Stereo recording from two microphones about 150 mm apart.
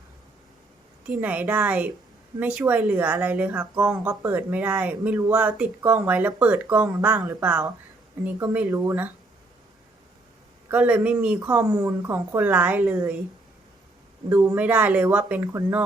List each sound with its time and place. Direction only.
1.0 s speech: 10° right (ahead or behind)
8.2 s speech: 10° right (ahead or behind)
10.7 s speech: 10° right (ahead or behind)
14.3 s speech: 10° right (ahead or behind)